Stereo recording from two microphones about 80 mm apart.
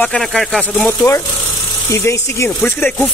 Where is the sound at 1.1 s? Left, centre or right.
Left.